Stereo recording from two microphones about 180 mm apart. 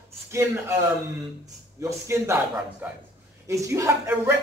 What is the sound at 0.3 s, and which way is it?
Speech, 15° right (ahead or behind).